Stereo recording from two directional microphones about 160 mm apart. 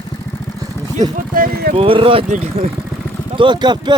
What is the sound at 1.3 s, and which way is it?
Speech, 65° right (ahead or behind).